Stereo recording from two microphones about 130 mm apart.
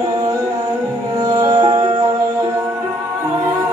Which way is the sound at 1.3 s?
30° right (ahead or behind).